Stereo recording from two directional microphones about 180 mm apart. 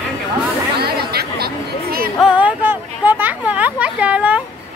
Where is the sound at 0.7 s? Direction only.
60° right (ahead or behind).